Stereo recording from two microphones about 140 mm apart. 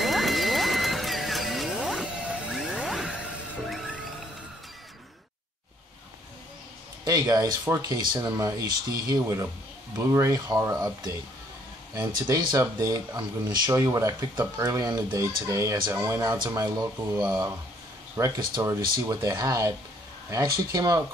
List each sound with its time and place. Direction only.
0.0 s music: centre (ahead or behind)
7.1 s speech: 30° right (ahead or behind)